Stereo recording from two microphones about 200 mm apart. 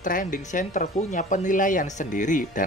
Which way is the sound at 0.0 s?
40° left (ahead or behind).